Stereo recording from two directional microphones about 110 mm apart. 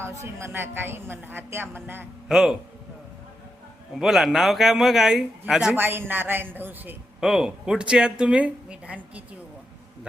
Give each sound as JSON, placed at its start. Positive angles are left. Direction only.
{"t": 0.0, "sound": "a woman's voice", "side_deg": -25}
{"t": 2.2, "sound": "speech", "side_deg": -5}
{"t": 3.9, "sound": "a man's voice", "side_deg": -5}
{"t": 5.7, "sound": "a woman's voice", "side_deg": -20}
{"t": 7.2, "sound": "speech", "side_deg": -5}